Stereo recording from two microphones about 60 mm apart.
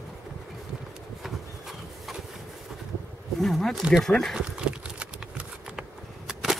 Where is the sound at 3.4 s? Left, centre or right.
Centre.